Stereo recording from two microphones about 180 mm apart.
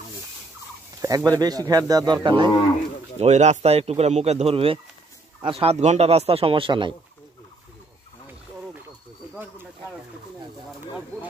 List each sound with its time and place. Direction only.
1.0 s speech: 20° right (ahead or behind)
3.2 s speech: 40° right (ahead or behind)